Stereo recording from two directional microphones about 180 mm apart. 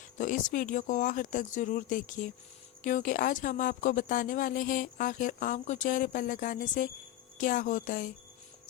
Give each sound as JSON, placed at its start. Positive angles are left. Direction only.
{"t": 0.2, "sound": "speech", "side_deg": 45}